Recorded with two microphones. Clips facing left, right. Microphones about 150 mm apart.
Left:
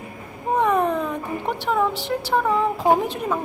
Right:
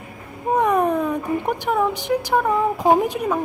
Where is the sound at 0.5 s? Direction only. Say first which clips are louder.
Right 2 dB; 10° right (ahead or behind).